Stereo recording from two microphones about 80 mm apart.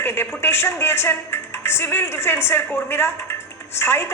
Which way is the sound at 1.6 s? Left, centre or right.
Left.